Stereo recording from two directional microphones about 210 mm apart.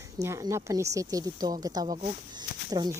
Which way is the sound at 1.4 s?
30° right (ahead or behind).